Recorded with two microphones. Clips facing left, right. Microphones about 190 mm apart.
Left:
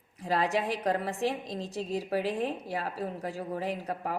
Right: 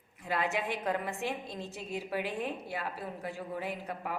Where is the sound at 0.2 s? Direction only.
35° left (ahead or behind).